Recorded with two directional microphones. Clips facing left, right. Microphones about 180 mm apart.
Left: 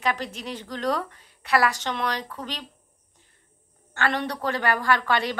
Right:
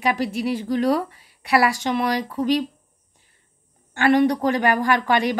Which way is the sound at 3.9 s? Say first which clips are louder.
Right 10 dB; 15° right (ahead or behind).